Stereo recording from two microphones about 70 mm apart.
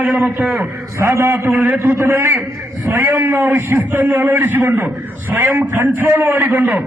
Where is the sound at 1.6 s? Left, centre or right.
Right.